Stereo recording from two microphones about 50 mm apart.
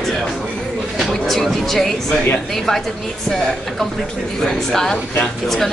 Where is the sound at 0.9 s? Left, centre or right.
Centre.